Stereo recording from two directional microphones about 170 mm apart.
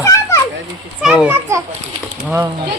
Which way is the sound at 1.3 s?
15° right (ahead or behind).